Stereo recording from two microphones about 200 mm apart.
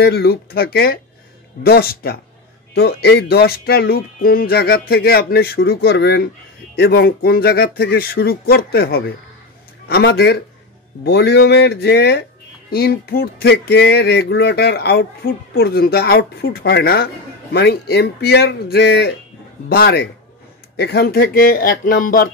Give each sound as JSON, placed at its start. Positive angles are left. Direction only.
{"t": 0.0, "sound": "speech", "side_deg": 55}